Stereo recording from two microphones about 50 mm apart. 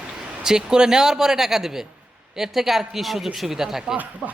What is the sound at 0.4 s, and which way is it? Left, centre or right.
Speech, centre.